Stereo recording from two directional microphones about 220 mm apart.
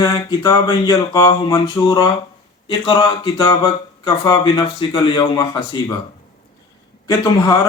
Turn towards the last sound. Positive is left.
turn(degrees=15)  # may be behind; listen again after turning